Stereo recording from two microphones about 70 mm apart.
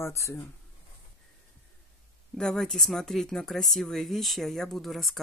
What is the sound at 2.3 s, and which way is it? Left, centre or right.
Speech, centre.